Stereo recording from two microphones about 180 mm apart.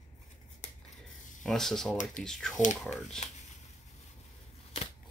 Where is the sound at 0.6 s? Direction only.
40° left (ahead or behind).